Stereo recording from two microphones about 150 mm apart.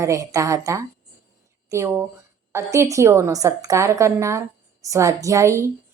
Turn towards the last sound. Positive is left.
turn(degrees=-20)  # may be behind; listen again after turning